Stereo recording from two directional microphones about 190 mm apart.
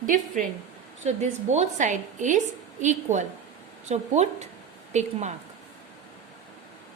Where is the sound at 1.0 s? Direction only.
35° right (ahead or behind).